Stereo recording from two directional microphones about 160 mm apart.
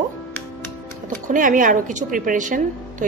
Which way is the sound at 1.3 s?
55° right (ahead or behind).